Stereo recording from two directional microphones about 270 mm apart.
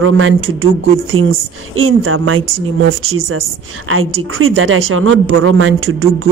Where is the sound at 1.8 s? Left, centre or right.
Right.